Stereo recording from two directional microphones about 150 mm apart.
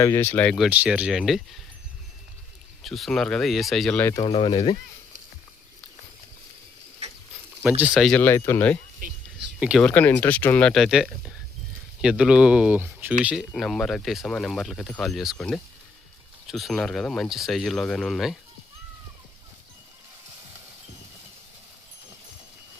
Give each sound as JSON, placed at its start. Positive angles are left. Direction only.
{"t": 0.0, "sound": "speech", "side_deg": 15}
{"t": 0.5, "sound": "speech", "side_deg": -5}
{"t": 2.8, "sound": "speech", "side_deg": 0}
{"t": 4.3, "sound": "speech", "side_deg": 35}
{"t": 7.6, "sound": "speech", "side_deg": -10}
{"t": 8.2, "sound": "speech", "side_deg": 15}
{"t": 9.6, "sound": "speech", "side_deg": -5}
{"t": 9.8, "sound": "speech", "side_deg": 10}